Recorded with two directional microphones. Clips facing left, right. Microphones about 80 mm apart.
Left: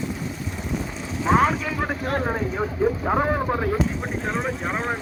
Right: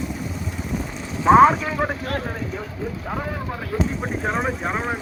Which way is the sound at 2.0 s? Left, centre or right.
Left.